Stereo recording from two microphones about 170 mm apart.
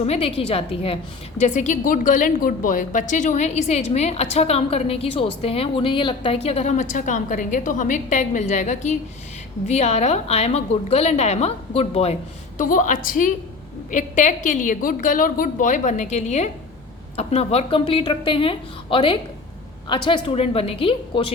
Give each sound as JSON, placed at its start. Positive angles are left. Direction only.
{"t": 0.0, "sound": "a woman's voice", "side_deg": 35}
{"t": 1.4, "sound": "a woman's voice", "side_deg": 45}
{"t": 12.5, "sound": "a woman's voice", "side_deg": 50}